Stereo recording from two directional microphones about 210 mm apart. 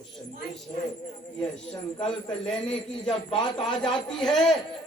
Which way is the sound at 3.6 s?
5° left (ahead or behind).